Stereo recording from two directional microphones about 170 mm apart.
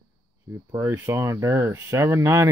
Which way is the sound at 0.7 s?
15° right (ahead or behind).